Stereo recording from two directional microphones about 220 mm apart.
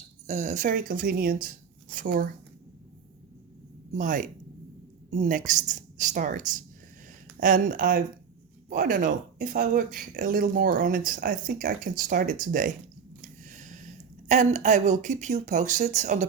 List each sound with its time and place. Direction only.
0.3 s speech: 30° right (ahead or behind)
3.9 s speech: 35° right (ahead or behind)